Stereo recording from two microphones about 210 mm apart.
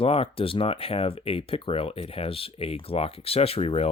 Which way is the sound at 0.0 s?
25° left (ahead or behind).